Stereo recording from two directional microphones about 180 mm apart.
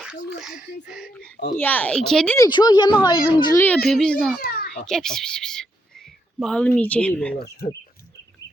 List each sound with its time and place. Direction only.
0.0 s speech: 5° right (ahead or behind)
1.5 s speech: 10° left (ahead or behind)
2.4 s speech: 25° left (ahead or behind)
3.8 s speech: 5° left (ahead or behind)
4.4 s children playing: 55° left (ahead or behind)
4.7 s speech: centre (ahead or behind)
7.4 s speech: 20° left (ahead or behind)